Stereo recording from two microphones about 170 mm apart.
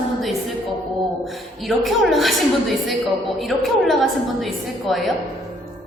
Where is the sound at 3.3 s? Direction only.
Centre (ahead or behind).